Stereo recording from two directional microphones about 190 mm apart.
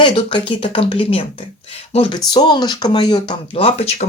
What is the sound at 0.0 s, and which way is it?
Speech, 25° left (ahead or behind).